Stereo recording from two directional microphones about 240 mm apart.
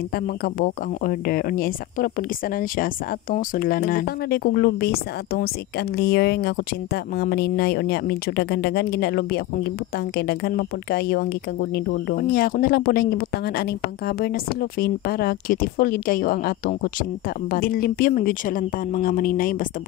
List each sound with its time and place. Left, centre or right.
0.1 s speech: left